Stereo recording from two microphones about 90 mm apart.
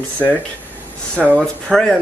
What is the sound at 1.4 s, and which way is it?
Speech, 5° left (ahead or behind).